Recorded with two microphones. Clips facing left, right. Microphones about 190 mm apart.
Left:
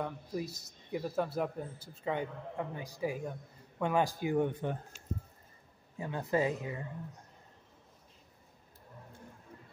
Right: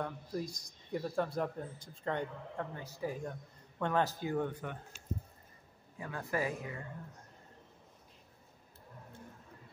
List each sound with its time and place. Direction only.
0.0 s speech: 5° left (ahead or behind)
5.9 s speech: 25° left (ahead or behind)